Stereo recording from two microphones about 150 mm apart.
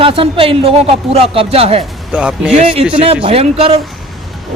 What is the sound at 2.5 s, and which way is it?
Speech, 40° right (ahead or behind).